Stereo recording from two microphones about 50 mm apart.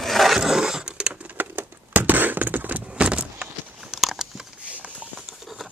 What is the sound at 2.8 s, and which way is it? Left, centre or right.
Vehicle, right.